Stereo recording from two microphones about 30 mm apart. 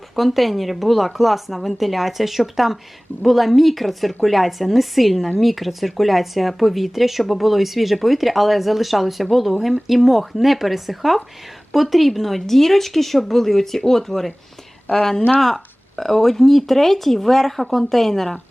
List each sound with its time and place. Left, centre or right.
0.2 s speech: centre
14.9 s speech: centre